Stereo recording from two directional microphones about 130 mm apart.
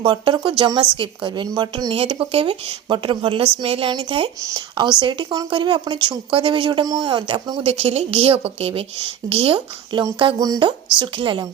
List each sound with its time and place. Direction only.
0.0 s a woman's voice: 35° right (ahead or behind)
7.6 s a woman's voice: 50° right (ahead or behind)
10.3 s speech: 30° right (ahead or behind)